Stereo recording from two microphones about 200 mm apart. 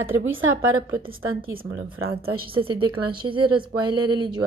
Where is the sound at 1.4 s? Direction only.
45° right (ahead or behind).